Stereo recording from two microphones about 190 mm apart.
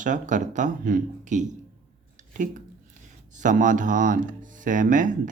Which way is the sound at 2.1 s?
40° right (ahead or behind).